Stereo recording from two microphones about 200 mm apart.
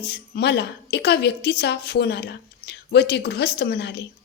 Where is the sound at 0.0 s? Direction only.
55° left (ahead or behind).